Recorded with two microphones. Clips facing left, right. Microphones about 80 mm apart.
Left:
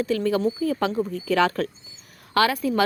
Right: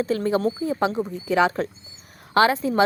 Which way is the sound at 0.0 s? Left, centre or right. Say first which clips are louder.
Even; right.